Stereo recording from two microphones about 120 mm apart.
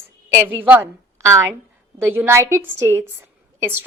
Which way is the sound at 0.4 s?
15° right (ahead or behind).